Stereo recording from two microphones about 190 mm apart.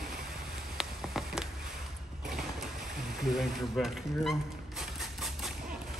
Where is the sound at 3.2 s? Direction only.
Centre (ahead or behind).